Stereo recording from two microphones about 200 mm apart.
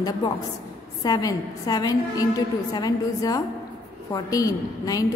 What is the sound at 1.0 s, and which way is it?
A woman's voice, 20° left (ahead or behind).